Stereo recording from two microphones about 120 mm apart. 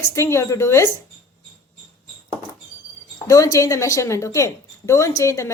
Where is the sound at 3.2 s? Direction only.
30° left (ahead or behind).